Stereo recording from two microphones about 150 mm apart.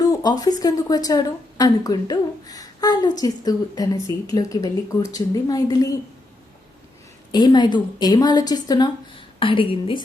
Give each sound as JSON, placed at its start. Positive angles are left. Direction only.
{"t": 0.0, "sound": "a woman's voice", "side_deg": 25}
{"t": 7.3, "sound": "a woman's voice", "side_deg": 25}